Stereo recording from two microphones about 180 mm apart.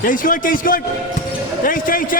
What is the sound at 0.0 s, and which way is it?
A man's voice, 50° left (ahead or behind).